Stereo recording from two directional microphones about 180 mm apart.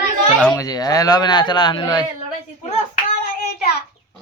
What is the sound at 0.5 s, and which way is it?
Speech, 20° left (ahead or behind).